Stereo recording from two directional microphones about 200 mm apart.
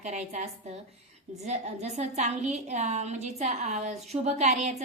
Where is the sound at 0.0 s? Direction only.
35° right (ahead or behind).